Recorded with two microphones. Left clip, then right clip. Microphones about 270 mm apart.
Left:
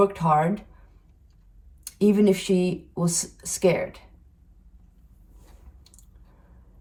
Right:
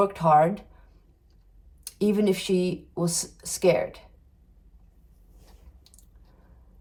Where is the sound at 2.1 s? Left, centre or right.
Centre.